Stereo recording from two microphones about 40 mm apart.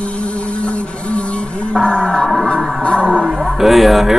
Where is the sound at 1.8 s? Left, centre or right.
Centre.